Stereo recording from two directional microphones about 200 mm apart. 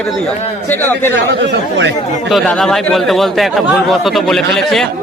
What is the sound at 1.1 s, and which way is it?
Speech, 60° right (ahead or behind).